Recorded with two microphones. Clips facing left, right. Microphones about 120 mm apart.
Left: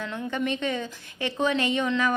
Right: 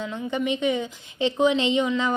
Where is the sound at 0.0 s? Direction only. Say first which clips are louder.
Right 2 dB; 15° right (ahead or behind).